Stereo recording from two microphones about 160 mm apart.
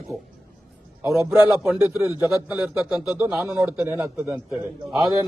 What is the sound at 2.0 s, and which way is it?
Speech, 20° left (ahead or behind).